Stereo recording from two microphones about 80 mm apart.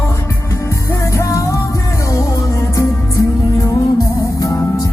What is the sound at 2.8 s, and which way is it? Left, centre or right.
Music, left.